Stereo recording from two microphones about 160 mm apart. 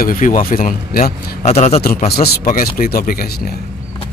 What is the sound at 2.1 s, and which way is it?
Speech, 75° left (ahead or behind).